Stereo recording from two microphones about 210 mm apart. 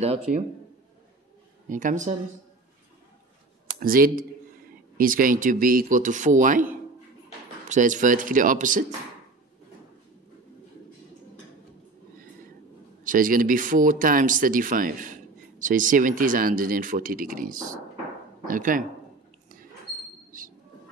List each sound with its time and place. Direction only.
0.0 s speech: 30° right (ahead or behind)
1.7 s speech: 40° right (ahead or behind)
3.8 s speech: 45° right (ahead or behind)
7.7 s speech: 40° right (ahead or behind)
13.0 s speech: 40° right (ahead or behind)